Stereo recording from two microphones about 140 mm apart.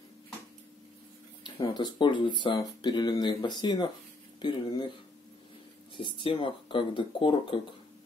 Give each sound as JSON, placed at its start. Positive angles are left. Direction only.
{"t": 1.4, "sound": "speech", "side_deg": 30}
{"t": 5.9, "sound": "speech", "side_deg": 35}